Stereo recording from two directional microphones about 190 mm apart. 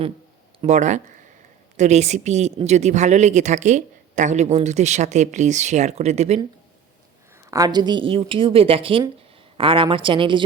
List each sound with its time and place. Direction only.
0.6 s speech: 40° right (ahead or behind)
7.5 s a woman's voice: 20° right (ahead or behind)